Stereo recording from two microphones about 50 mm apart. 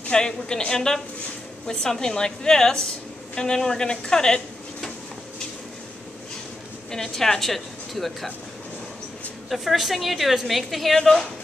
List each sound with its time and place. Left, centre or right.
0.1 s a woman's voice: centre
6.9 s speech: centre
9.5 s a woman's voice: centre